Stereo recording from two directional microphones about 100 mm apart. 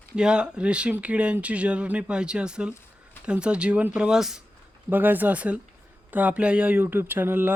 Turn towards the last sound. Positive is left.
turn(degrees=-20)  # may be behind; listen again after turning